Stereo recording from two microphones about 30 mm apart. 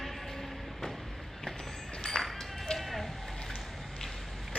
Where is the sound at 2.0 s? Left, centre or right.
Left.